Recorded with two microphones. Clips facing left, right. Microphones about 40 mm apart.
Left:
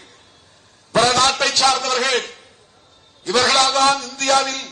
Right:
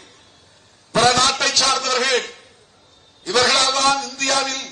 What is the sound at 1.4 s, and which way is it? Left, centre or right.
Speech, left.